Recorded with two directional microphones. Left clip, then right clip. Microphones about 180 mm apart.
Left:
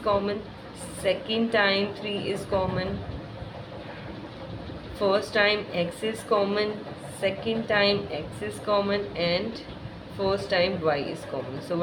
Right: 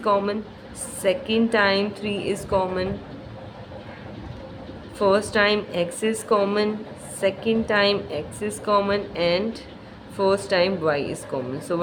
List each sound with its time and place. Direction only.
0.0 s a woman's voice: 30° right (ahead or behind)
4.9 s a woman's voice: 30° right (ahead or behind)